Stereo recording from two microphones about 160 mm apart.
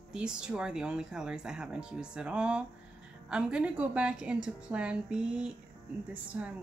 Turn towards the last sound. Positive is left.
turn(degrees=-10)  # may be behind; listen again after turning